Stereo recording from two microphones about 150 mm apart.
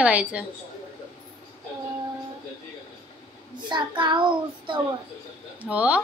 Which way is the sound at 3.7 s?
30° right (ahead or behind).